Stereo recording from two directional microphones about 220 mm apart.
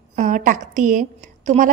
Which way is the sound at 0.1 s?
35° right (ahead or behind).